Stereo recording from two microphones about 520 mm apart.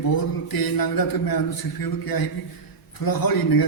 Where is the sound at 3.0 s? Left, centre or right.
Left.